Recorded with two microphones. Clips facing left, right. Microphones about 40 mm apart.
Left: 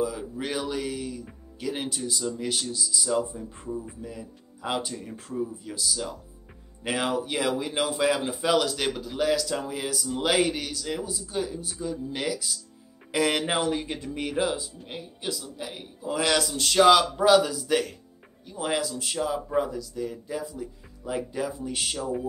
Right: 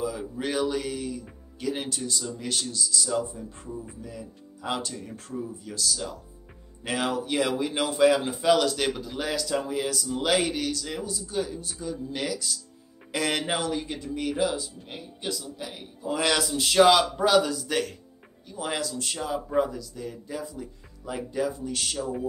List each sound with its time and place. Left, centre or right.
0.0 s a man's voice: centre
13.6 s speech: left
14.9 s a man's voice: centre
21.9 s a man's voice: centre